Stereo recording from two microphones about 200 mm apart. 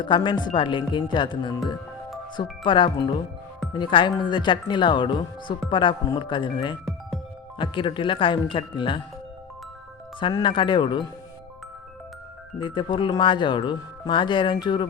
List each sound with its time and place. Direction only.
0.0 s speech: 25° left (ahead or behind)
10.2 s speech: 25° left (ahead or behind)
12.6 s speech: 25° left (ahead or behind)